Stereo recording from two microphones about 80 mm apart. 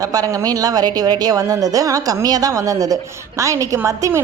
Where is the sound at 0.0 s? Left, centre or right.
Right.